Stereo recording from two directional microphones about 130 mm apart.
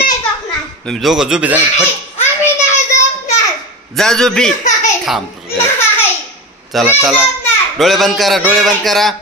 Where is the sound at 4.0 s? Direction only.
5° left (ahead or behind).